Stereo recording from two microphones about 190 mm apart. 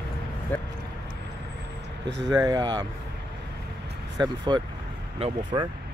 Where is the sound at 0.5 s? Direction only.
10° left (ahead or behind).